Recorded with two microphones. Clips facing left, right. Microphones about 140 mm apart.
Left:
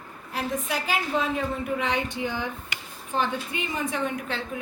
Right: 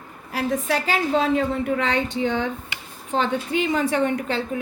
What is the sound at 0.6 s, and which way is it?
A woman's voice, 80° right.